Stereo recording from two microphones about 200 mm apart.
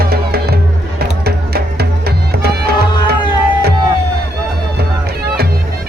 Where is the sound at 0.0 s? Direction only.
50° right (ahead or behind).